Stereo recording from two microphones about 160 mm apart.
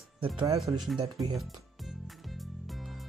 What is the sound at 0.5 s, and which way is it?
Speech, centre (ahead or behind).